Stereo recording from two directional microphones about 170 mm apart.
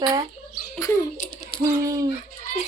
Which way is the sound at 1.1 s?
45° left (ahead or behind).